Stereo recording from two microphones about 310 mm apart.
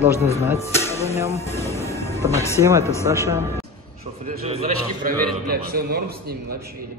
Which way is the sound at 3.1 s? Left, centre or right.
Centre.